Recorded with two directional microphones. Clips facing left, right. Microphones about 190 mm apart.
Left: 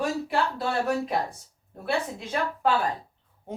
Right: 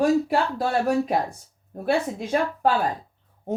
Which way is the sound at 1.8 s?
45° right (ahead or behind).